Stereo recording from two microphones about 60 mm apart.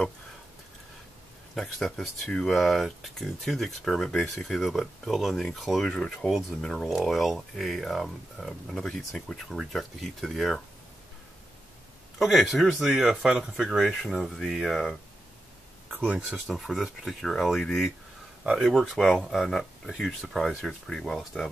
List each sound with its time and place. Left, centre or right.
1.5 s speech: centre
5.9 s speech: centre
6.2 s speech: centre
9.6 s speech: centre
12.2 s speech: centre
14.0 s speech: centre
16.0 s speech: centre
16.3 s speech: centre